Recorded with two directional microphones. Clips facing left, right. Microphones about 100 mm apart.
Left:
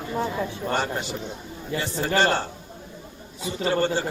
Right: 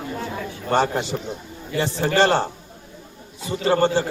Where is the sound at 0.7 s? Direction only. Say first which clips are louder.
Right 9 dB; 35° right (ahead or behind).